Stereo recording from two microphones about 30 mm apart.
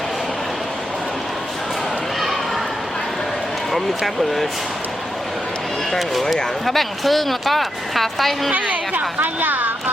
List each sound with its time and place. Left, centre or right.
3.7 s speech: centre
6.3 s speech: centre
8.6 s a woman's voice: right
9.2 s a woman's voice: right